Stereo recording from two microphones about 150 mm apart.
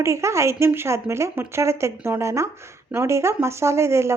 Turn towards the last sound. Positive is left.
turn(degrees=-20)  # may be behind; listen again after turning